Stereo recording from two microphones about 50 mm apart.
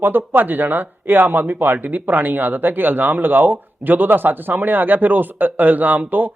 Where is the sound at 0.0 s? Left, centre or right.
Right.